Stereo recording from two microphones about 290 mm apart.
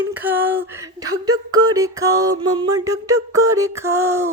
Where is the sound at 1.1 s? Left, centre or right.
Right.